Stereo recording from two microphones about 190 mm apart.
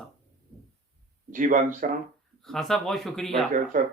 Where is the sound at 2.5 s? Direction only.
Centre (ahead or behind).